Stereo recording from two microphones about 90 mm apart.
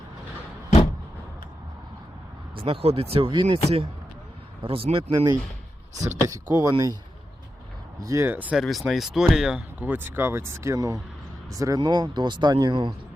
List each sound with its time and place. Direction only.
2.6 s speech: 90° right
6.1 s speech: 35° right (ahead or behind)
6.5 s speech: 45° right (ahead or behind)
8.0 s speech: 35° right (ahead or behind)
8.3 s speech: 20° right (ahead or behind)
8.5 s speech: centre (ahead or behind)
9.8 s speech: 20° right (ahead or behind); by 11.8 s 40° right (ahead or behind)
11.8 s speech: 55° right (ahead or behind)